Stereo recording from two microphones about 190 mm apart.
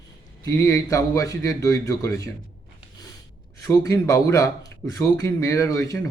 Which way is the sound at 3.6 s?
15° left (ahead or behind).